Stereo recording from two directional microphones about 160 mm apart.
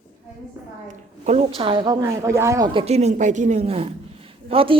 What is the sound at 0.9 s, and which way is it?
Speech, 45° right (ahead or behind).